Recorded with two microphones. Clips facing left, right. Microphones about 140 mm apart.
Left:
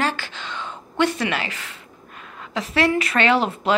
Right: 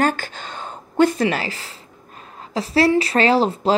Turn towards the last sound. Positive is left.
turn(degrees=-35)  # may be behind; listen again after turning